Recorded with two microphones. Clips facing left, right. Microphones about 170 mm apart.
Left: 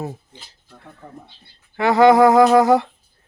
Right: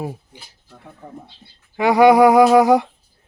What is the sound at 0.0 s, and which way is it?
Speech, 10° right (ahead or behind).